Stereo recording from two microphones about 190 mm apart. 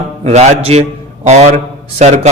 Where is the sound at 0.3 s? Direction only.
35° right (ahead or behind).